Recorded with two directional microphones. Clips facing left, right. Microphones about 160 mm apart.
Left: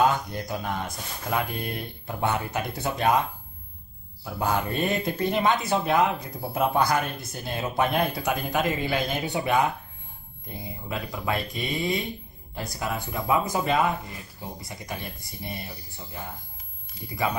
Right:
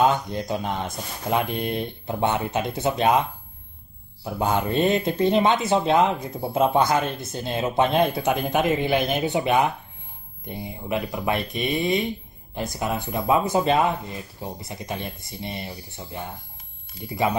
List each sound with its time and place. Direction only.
0.0 s speech: 20° right (ahead or behind)